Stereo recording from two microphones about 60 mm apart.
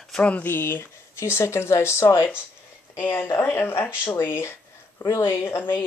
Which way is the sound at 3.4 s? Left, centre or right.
Left.